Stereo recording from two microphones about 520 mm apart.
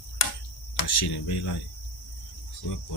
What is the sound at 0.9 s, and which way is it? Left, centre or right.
Speech, left.